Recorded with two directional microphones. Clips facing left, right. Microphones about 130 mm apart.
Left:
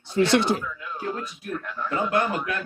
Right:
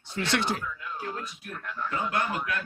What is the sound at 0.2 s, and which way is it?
Speech, 30° left (ahead or behind).